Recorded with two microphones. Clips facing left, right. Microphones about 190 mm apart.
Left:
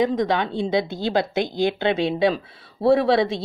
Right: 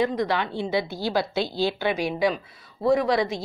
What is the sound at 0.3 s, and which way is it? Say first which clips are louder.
Speech: left 4 dB; 20° left (ahead or behind).